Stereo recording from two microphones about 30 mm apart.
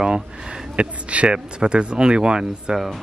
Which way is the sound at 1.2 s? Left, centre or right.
Right.